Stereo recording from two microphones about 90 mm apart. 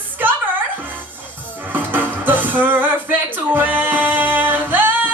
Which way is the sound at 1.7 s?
20° right (ahead or behind).